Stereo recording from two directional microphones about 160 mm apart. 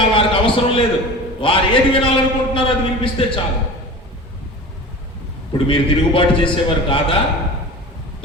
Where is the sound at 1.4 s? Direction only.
35° left (ahead or behind).